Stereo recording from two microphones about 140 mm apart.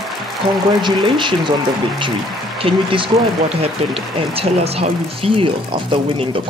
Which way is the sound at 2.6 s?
40° right (ahead or behind).